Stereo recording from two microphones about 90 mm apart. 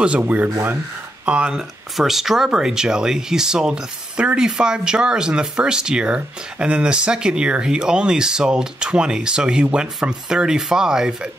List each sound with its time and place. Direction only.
0.0 s speech: 15° right (ahead or behind)